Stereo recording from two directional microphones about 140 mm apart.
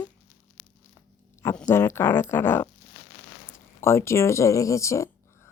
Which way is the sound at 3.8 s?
20° left (ahead or behind).